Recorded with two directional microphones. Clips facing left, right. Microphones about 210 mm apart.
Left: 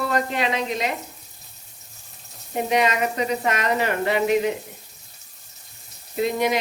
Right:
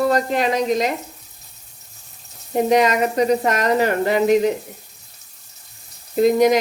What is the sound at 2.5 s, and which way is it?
Speech, 40° right (ahead or behind).